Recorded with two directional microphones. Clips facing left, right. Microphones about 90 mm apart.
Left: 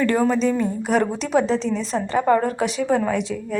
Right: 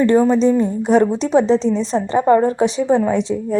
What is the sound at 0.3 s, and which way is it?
A woman's voice, 30° right (ahead or behind).